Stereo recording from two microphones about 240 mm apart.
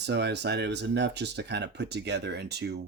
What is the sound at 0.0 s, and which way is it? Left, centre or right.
Speech, right.